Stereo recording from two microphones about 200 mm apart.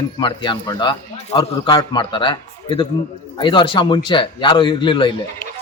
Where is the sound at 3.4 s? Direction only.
25° left (ahead or behind).